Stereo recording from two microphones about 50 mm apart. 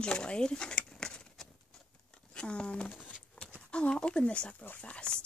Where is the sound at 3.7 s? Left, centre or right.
Centre.